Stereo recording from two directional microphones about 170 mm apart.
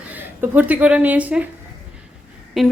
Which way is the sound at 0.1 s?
10° right (ahead or behind).